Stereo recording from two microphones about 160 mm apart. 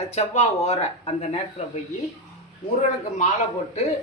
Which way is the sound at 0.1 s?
40° left (ahead or behind).